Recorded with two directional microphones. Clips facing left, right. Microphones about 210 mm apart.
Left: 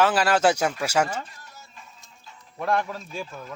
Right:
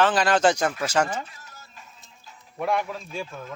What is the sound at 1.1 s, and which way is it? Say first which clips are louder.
Music: right 1 dB; 5° right (ahead or behind).